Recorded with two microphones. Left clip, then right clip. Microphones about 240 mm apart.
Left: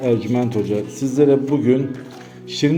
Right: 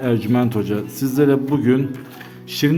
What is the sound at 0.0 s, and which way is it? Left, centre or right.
A man's voice, right.